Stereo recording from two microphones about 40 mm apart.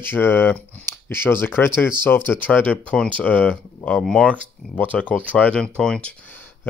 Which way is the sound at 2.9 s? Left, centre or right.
Left.